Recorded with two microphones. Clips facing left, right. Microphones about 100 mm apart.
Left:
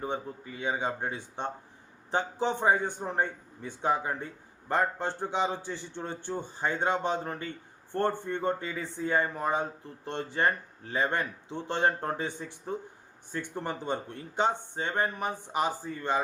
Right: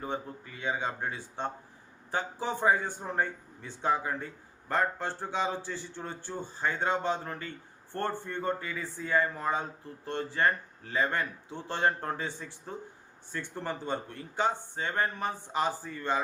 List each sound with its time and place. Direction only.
0.0 s speech: 20° left (ahead or behind)